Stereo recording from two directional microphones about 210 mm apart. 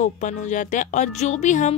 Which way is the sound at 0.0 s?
35° left (ahead or behind).